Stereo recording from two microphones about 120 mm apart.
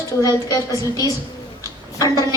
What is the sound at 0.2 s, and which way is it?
Speech, 30° left (ahead or behind).